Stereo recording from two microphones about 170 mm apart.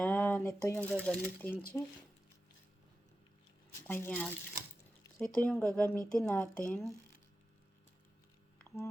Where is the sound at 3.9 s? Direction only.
10° left (ahead or behind).